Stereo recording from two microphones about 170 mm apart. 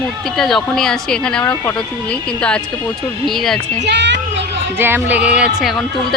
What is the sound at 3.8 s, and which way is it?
Speech, 90° right.